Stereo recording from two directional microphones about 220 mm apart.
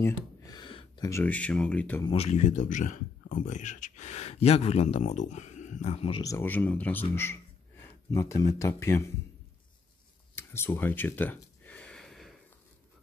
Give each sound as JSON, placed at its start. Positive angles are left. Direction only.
{"t": 0.0, "sound": "speech", "side_deg": 20}
{"t": 2.0, "sound": "speech", "side_deg": 30}
{"t": 10.3, "sound": "a sound", "side_deg": 10}